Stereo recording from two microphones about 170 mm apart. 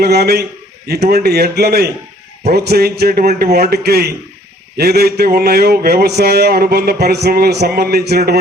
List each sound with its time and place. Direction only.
0.0 s speech: 70° right (ahead or behind)